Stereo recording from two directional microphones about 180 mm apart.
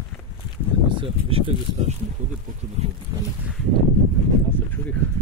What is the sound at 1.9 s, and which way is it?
Speech, 40° right (ahead or behind).